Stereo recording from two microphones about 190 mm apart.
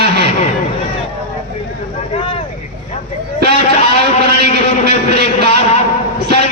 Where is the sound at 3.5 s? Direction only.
35° left (ahead or behind).